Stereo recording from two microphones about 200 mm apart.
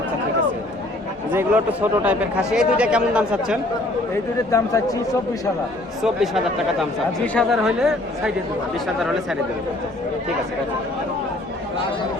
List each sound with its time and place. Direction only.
1.3 s speech: 10° right (ahead or behind)
4.5 s speech: 15° left (ahead or behind)
6.0 s speech: centre (ahead or behind)